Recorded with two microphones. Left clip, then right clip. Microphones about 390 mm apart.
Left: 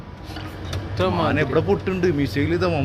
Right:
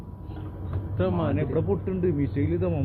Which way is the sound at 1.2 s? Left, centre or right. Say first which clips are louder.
Left 7 dB; left.